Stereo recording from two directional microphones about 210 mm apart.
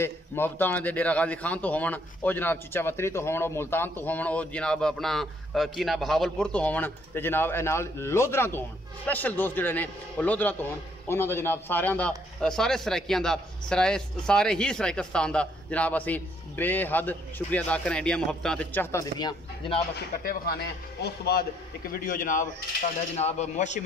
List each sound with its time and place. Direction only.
0.0 s a man's voice: 10° left (ahead or behind)
20.2 s a man's voice: 45° left (ahead or behind)